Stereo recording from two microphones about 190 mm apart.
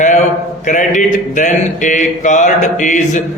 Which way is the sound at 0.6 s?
40° left (ahead or behind).